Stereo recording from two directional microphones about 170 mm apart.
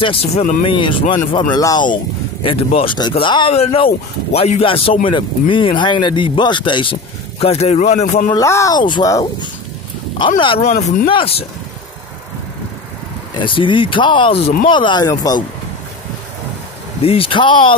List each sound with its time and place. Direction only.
0.0 s speech: 35° left (ahead or behind)
8.3 s speech: 20° left (ahead or behind)
13.4 s speech: 30° left (ahead or behind)
17.0 s speech: 35° left (ahead or behind)